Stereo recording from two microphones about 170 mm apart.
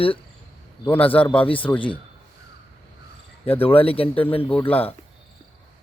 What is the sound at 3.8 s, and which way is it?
Speech, 35° left (ahead or behind).